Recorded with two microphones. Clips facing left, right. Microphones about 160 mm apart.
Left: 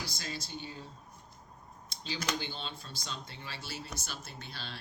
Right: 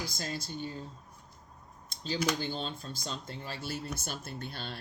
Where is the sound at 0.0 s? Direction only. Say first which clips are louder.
Right 4 dB; 45° right (ahead or behind).